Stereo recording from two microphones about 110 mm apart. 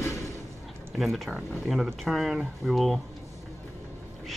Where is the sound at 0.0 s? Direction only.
25° left (ahead or behind).